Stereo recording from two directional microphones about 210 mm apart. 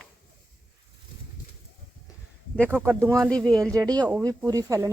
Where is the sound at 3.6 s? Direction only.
15° right (ahead or behind).